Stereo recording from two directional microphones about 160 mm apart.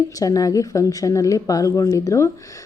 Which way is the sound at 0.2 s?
20° left (ahead or behind).